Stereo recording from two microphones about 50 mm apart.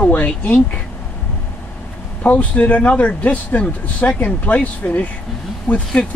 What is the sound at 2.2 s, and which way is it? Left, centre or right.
Speech, left.